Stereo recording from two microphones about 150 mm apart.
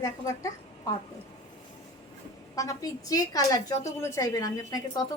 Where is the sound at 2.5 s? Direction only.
20° left (ahead or behind).